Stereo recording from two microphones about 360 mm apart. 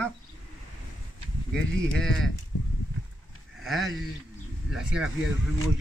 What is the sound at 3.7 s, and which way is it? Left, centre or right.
Speech, centre.